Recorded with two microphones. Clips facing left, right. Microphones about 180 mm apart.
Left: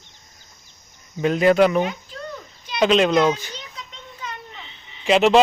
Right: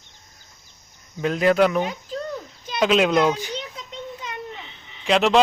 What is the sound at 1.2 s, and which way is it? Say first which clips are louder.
Speech: left 2 dB; centre (ahead or behind).